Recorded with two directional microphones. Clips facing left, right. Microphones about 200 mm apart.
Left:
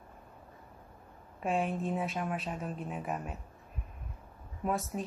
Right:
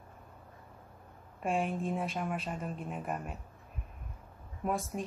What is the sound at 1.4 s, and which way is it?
Speech, centre (ahead or behind).